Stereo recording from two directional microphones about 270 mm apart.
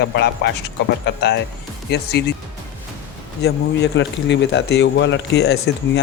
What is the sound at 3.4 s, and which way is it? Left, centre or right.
A man's voice, left.